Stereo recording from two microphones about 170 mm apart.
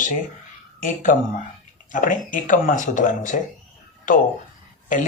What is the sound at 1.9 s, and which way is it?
Speech, 50° left (ahead or behind).